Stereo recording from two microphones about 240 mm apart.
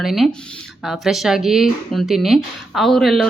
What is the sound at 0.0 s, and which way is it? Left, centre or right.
Speech, centre.